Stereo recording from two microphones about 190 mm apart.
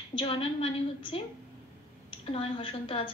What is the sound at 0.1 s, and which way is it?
Speech, 30° left (ahead or behind).